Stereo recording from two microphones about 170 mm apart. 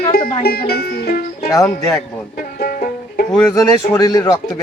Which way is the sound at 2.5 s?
60° left (ahead or behind).